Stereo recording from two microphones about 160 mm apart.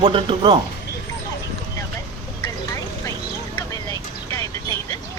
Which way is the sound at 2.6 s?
20° left (ahead or behind).